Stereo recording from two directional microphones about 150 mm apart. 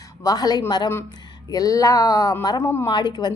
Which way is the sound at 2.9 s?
30° left (ahead or behind).